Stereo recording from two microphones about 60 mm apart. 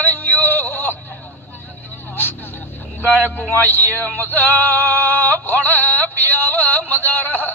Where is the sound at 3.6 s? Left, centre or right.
Left.